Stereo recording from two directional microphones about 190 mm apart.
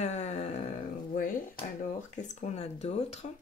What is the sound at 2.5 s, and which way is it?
Speech, 35° left (ahead or behind).